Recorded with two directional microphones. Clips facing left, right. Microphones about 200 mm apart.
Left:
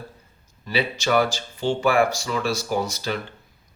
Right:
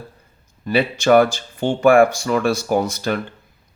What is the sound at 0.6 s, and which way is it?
Speech, 55° right (ahead or behind).